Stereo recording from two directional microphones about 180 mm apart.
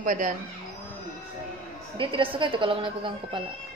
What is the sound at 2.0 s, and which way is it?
A woman's voice, 30° right (ahead or behind).